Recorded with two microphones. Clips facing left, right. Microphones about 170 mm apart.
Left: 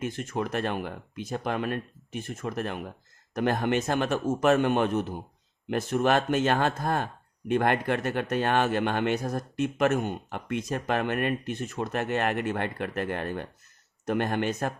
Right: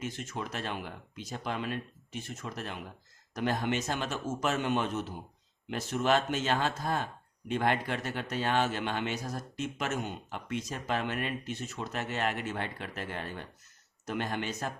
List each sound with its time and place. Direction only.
0.0 s speech: 55° left (ahead or behind)